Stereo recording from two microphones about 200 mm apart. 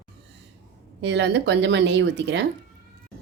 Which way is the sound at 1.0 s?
60° right (ahead or behind).